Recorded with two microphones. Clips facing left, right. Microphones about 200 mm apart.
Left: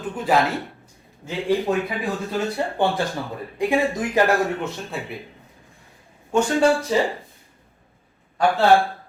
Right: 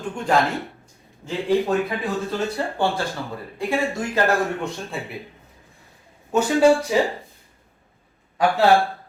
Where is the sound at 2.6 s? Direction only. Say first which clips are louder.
Left 3 dB; 20° left (ahead or behind).